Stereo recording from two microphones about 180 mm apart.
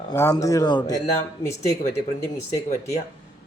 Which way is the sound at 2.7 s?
40° left (ahead or behind).